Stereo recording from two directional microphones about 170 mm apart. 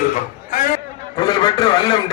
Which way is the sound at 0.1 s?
50° left (ahead or behind).